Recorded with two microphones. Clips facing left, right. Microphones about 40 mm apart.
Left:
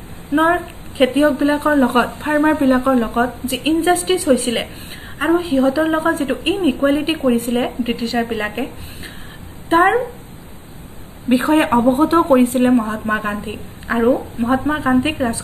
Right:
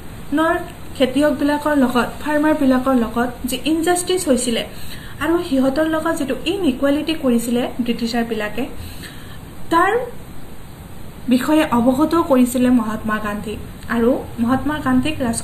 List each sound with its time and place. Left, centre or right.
0.3 s a woman's voice: centre
9.7 s speech: centre
11.3 s a woman's voice: centre